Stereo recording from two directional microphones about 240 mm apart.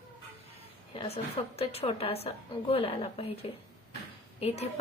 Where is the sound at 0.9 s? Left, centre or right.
Left.